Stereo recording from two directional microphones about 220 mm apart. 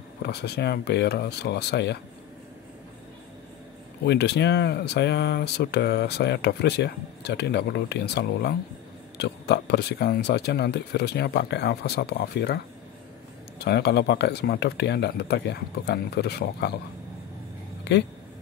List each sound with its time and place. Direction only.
0.2 s speech: 50° left (ahead or behind)
4.0 s speech: 50° left (ahead or behind)
13.6 s speech: 50° left (ahead or behind)